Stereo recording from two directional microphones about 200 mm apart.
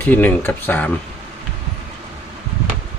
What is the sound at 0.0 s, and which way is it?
Speech, 10° left (ahead or behind).